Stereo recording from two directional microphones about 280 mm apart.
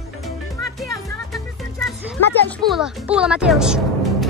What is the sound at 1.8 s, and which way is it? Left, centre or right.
Speech, centre.